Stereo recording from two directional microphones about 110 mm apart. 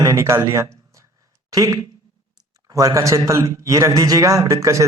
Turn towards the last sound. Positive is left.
turn(degrees=-30)  # may be behind; listen again after turning